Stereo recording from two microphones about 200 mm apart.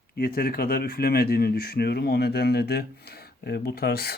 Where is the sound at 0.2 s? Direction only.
50° left (ahead or behind).